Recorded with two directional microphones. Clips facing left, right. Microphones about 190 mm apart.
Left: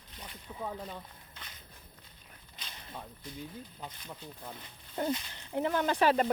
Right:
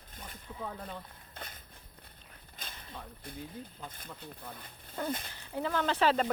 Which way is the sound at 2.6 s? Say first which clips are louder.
Left 1 dB; 50° right (ahead or behind).